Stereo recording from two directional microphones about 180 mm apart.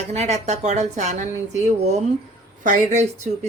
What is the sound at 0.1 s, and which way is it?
Speech, 40° right (ahead or behind).